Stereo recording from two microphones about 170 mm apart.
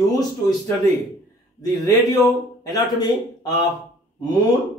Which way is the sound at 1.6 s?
20° left (ahead or behind).